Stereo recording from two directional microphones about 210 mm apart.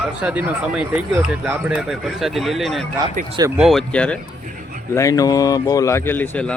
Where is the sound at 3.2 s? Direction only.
40° right (ahead or behind).